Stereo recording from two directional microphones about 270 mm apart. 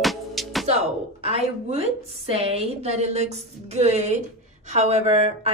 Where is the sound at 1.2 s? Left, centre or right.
Right.